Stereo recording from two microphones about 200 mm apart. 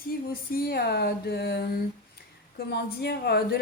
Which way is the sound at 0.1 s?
50° left (ahead or behind).